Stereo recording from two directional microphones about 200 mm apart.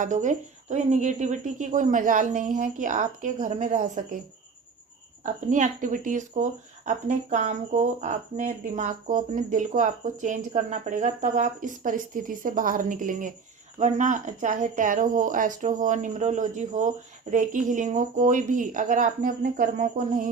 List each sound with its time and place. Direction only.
0.0 s speech: 40° right (ahead or behind)
5.2 s speech: 40° right (ahead or behind)